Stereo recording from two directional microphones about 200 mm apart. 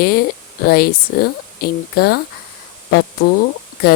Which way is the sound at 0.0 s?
50° left (ahead or behind).